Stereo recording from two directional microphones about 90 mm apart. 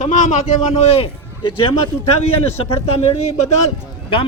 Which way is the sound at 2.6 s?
90° left.